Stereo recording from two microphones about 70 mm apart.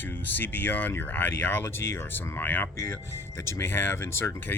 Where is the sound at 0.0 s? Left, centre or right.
Left.